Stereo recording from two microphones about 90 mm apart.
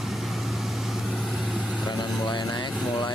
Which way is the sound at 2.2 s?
50° left (ahead or behind).